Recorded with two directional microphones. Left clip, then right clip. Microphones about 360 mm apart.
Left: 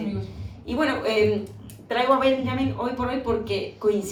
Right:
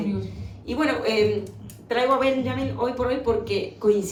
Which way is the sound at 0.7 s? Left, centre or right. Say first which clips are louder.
Even; centre.